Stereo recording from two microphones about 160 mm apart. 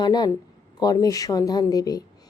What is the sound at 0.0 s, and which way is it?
A woman's voice, 25° left (ahead or behind).